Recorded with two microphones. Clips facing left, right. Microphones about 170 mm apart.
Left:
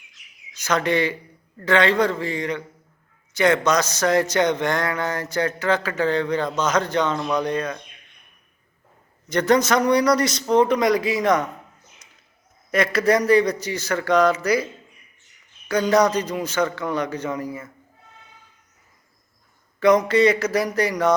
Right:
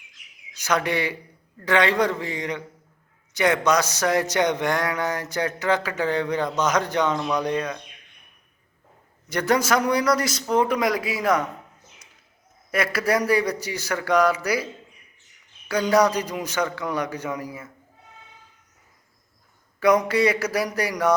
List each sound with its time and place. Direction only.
0.6 s a man's voice: 10° right (ahead or behind)
9.3 s a man's voice: 10° right (ahead or behind)
12.7 s a man's voice: 5° right (ahead or behind)
15.7 s a man's voice: 10° right (ahead or behind)
19.8 s a man's voice: 10° right (ahead or behind)